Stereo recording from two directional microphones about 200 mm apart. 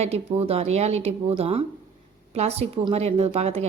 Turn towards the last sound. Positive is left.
turn(degrees=-30)  # may be behind; listen again after turning